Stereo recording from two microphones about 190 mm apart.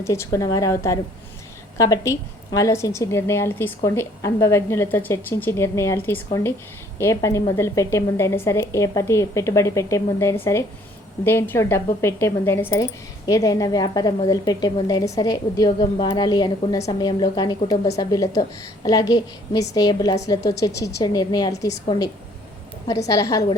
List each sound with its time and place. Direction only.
0.0 s a woman's voice: 15° left (ahead or behind)